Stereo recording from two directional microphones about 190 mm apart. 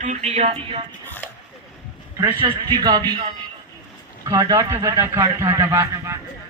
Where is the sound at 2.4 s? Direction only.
25° right (ahead or behind).